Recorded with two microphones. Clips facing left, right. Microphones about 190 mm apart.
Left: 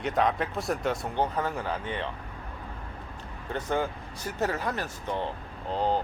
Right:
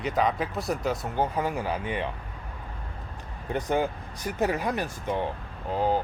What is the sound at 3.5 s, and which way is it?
Speech, 15° right (ahead or behind).